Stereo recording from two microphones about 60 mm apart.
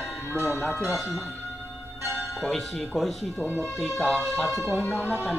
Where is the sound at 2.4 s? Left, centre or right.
Centre.